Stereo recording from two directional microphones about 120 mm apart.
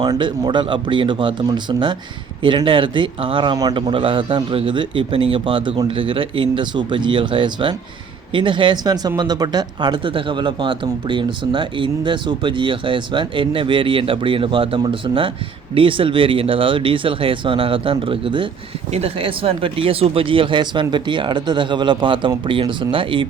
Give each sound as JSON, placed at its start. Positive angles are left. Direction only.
{"t": 0.2, "sound": "speech", "side_deg": -40}